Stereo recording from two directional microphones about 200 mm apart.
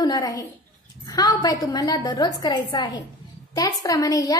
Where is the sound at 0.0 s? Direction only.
20° left (ahead or behind).